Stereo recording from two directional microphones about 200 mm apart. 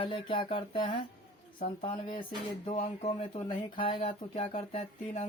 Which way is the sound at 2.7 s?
30° left (ahead or behind).